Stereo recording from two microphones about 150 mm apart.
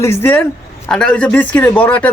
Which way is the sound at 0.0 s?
15° left (ahead or behind).